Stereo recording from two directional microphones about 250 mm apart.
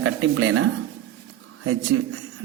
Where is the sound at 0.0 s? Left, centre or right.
Right.